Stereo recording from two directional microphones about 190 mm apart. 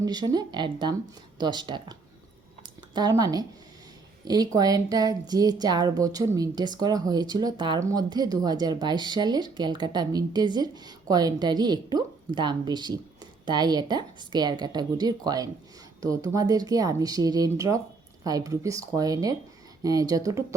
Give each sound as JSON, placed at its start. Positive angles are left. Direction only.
{"t": 0.0, "sound": "a woman's voice", "side_deg": -20}